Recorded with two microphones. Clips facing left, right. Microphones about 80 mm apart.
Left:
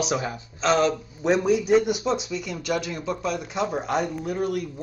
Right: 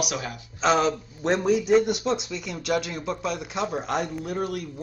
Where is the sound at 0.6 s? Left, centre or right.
Centre.